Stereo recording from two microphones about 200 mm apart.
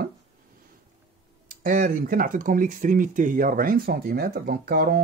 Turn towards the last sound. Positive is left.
turn(degrees=-50)  # may be behind; listen again after turning